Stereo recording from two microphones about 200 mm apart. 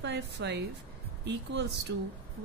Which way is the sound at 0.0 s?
60° right (ahead or behind).